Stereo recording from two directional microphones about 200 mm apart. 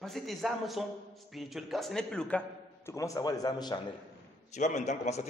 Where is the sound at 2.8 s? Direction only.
15° left (ahead or behind).